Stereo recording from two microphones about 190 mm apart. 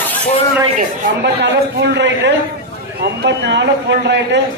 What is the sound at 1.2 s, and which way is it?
A man's voice, 65° right (ahead or behind).